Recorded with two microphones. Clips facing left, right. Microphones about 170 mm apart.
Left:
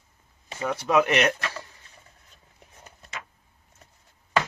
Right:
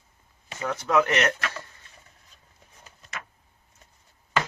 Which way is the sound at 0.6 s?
15° left (ahead or behind).